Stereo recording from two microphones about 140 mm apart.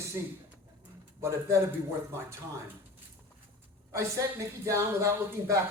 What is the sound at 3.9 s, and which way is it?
A man's voice, 20° right (ahead or behind).